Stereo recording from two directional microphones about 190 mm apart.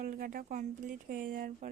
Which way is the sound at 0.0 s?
45° right (ahead or behind).